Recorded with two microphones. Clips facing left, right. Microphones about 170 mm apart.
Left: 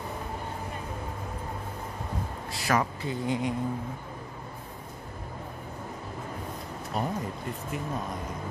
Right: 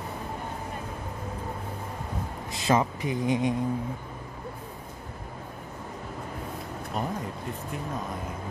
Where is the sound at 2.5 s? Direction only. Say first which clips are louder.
Right 3 dB; 20° right (ahead or behind).